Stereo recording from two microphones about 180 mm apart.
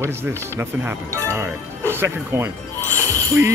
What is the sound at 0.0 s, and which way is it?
Speech, 15° right (ahead or behind).